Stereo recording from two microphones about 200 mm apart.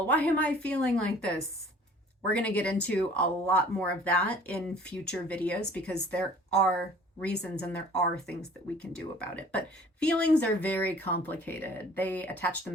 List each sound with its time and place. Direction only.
0.1 s speech: 5° left (ahead or behind)
2.3 s speech: 5° left (ahead or behind)